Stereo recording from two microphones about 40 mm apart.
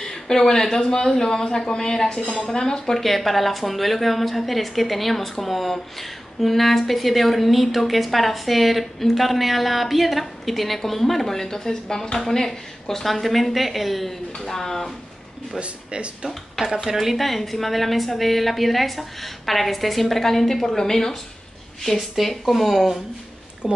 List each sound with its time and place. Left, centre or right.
0.0 s speech: centre
15.6 s speech: right
16.8 s speech: centre
23.6 s speech: centre